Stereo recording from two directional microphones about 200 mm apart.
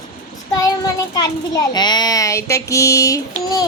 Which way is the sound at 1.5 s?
20° left (ahead or behind).